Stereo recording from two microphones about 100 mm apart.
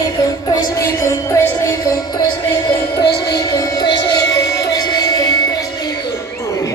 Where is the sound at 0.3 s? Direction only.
40° left (ahead or behind).